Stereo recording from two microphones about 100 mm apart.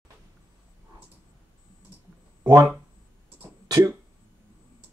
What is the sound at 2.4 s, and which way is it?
Speech, 35° right (ahead or behind).